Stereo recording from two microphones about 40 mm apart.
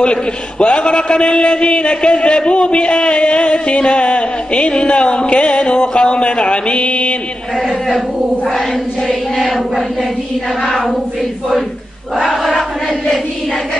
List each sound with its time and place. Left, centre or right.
0.0 s a man's voice: left
9.0 s choir: centre
12.3 s crowd: centre